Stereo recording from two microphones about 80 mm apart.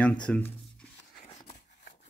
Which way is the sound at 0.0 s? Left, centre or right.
Centre.